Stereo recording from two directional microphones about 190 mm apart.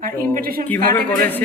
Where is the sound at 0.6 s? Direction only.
10° left (ahead or behind).